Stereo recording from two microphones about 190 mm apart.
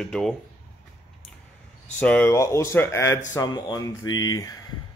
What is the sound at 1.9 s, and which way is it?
Speech, 5° left (ahead or behind).